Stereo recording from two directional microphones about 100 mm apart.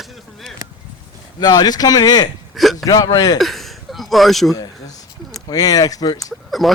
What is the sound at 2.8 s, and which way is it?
Speech, 40° left (ahead or behind).